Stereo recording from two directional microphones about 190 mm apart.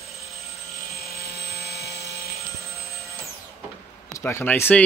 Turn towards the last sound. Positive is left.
turn(degrees=10)  # may be behind; listen again after turning